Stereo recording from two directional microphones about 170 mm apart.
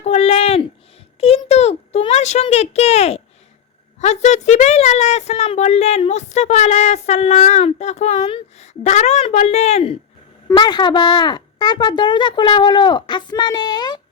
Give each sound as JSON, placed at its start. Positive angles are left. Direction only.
{"t": 0.0, "sound": "a woman's voice", "side_deg": 40}
{"t": 10.5, "sound": "speech", "side_deg": 25}